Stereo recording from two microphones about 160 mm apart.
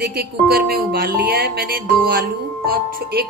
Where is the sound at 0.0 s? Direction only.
70° right (ahead or behind).